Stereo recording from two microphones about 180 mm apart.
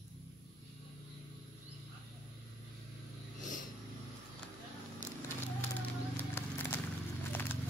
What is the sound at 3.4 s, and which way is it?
Vehicle, 45° left (ahead or behind).